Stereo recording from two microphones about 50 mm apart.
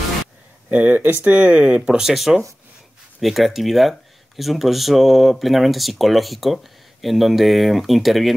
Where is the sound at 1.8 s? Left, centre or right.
Centre.